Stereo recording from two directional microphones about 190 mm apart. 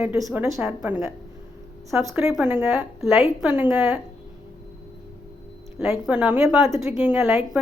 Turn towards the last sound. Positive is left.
turn(degrees=-10)  # may be behind; listen again after turning